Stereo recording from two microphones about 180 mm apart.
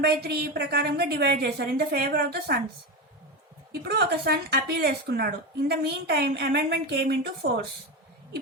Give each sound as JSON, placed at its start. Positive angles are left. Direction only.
{"t": 0.0, "sound": "speech", "side_deg": -60}
{"t": 3.7, "sound": "speech", "side_deg": -65}